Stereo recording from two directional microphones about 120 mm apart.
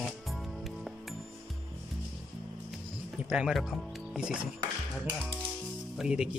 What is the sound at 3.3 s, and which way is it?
Speech, 5° right (ahead or behind).